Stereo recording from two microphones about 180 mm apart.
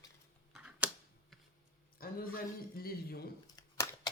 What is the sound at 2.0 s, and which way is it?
Speech, 55° left (ahead or behind).